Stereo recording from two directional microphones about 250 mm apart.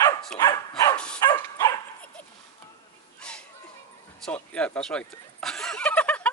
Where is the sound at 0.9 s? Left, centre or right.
Centre.